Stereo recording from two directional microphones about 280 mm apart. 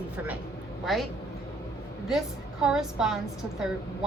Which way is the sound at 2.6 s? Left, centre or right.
Centre.